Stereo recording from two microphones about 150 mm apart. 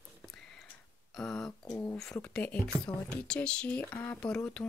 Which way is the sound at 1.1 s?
5° left (ahead or behind).